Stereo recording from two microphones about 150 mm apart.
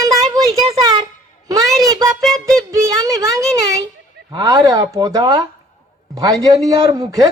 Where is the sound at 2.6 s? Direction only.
25° right (ahead or behind).